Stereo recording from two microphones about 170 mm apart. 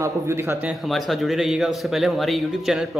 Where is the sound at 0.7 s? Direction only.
Centre (ahead or behind).